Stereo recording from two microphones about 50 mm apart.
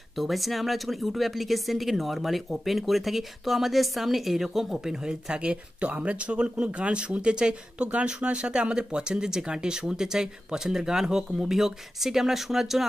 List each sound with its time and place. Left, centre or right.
0.1 s speech: centre